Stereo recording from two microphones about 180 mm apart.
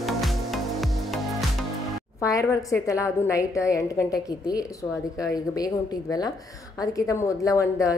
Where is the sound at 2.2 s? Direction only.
15° left (ahead or behind).